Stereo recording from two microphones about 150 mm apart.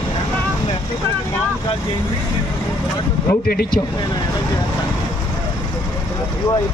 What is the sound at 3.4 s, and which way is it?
Speech, 90° left.